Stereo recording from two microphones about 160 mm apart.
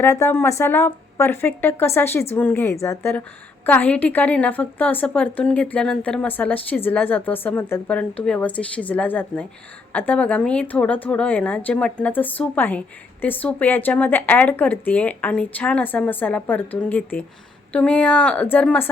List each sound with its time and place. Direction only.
0.0 s a woman's voice: 15° left (ahead or behind)